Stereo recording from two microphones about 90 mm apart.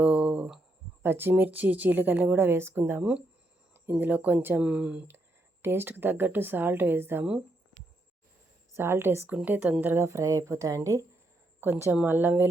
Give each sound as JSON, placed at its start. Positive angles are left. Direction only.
{"t": 0.0, "sound": "a sound", "side_deg": -15}
{"t": 1.0, "sound": "speech", "side_deg": -25}
{"t": 5.6, "sound": "speech", "side_deg": -25}
{"t": 8.7, "sound": "speech", "side_deg": -25}
{"t": 9.8, "sound": "speech", "side_deg": -25}